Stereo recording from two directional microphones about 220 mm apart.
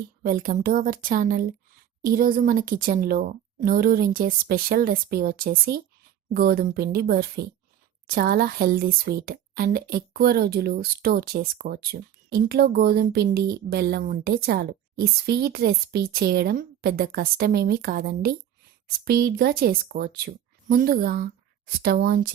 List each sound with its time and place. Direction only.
0.2 s a woman's voice: 40° right (ahead or behind)